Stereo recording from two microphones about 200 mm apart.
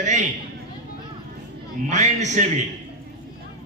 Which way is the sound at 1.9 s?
35° right (ahead or behind).